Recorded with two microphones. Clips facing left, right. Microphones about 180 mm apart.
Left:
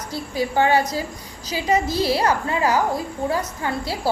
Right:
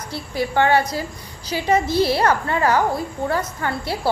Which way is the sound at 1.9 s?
35° left (ahead or behind).